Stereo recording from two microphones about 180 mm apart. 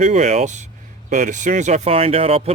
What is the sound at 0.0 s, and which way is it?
Speech, 40° right (ahead or behind).